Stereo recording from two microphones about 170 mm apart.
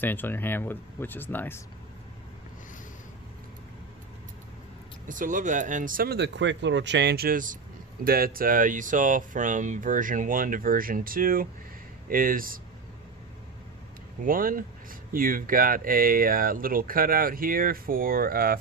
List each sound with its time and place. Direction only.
0.0 s speech: 10° left (ahead or behind)
5.0 s speech: 50° right (ahead or behind)
14.3 s speech: 55° right (ahead or behind)